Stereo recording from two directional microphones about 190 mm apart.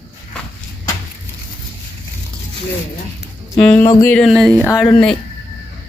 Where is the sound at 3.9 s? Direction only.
15° left (ahead or behind).